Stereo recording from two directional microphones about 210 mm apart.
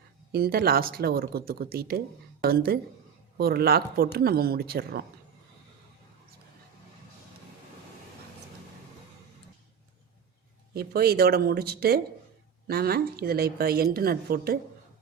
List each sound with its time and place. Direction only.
0.3 s a woman's voice: 45° right (ahead or behind)
10.8 s a woman's voice: 50° right (ahead or behind)